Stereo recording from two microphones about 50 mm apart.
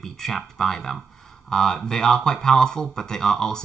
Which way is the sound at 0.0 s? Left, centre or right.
Centre.